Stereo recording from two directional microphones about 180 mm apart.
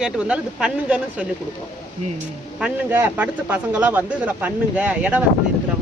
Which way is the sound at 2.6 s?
10° right (ahead or behind).